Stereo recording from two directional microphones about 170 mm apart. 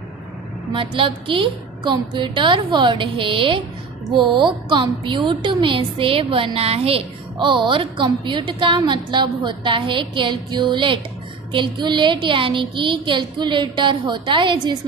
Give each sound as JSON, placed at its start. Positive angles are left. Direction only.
{"t": 0.7, "sound": "a woman's voice", "side_deg": -30}